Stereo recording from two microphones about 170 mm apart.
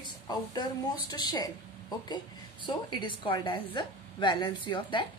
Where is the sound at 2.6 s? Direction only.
25° left (ahead or behind).